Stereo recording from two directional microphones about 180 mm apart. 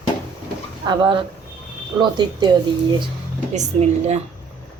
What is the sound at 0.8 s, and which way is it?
Speech, 25° right (ahead or behind).